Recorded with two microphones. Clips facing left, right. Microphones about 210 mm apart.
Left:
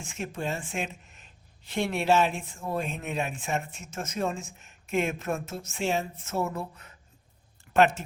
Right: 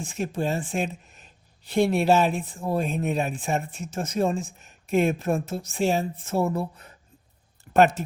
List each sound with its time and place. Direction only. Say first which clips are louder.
0.0 s speech: right 6 dB; 35° right (ahead or behind)